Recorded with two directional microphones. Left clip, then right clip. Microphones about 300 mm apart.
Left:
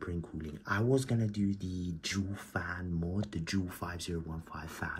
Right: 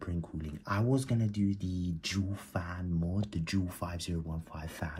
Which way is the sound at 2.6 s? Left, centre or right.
Right.